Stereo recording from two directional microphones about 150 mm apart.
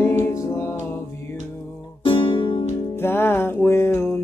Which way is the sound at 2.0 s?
35° left (ahead or behind).